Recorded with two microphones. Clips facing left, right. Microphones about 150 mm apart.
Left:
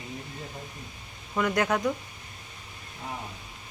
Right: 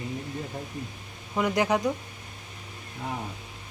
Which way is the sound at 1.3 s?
20° right (ahead or behind).